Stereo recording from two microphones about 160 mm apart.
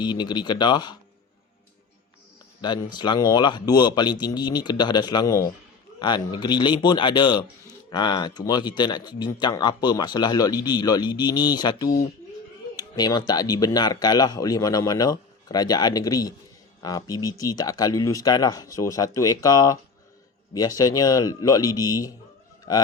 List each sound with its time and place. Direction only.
0.0 s speech: 30° left (ahead or behind)
2.6 s speech: 30° left (ahead or behind)